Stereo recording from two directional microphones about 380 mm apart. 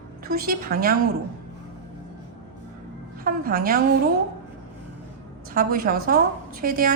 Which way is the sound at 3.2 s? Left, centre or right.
Right.